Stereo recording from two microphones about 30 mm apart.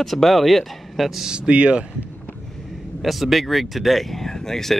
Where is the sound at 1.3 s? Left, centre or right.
Right.